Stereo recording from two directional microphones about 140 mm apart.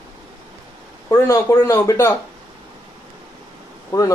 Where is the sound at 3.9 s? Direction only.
25° left (ahead or behind).